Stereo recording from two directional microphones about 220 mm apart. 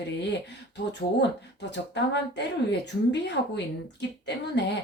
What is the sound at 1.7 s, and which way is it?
Speech, 50° left (ahead or behind).